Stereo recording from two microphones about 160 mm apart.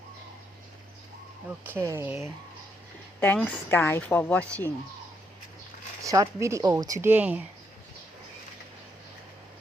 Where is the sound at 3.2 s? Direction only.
10° left (ahead or behind).